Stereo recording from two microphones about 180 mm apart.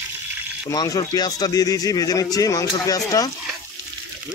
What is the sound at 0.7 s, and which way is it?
Speech, 20° left (ahead or behind).